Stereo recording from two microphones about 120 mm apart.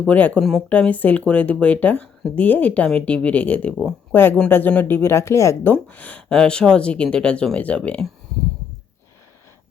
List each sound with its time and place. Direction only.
0.1 s speech: 10° left (ahead or behind)
5.7 s speech: 15° left (ahead or behind)